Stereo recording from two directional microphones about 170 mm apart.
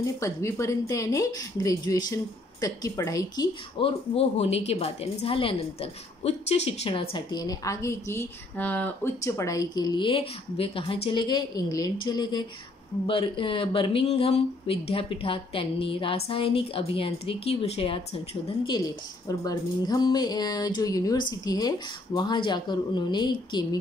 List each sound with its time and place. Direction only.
0.0 s a woman's voice: 15° left (ahead or behind)
3.8 s a woman's voice: 35° left (ahead or behind)
19.2 s a woman's voice: 20° left (ahead or behind)